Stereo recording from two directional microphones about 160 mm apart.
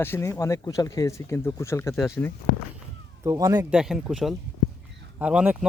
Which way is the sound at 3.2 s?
20° right (ahead or behind).